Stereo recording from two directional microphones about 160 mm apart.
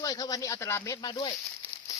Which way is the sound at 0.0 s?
25° left (ahead or behind).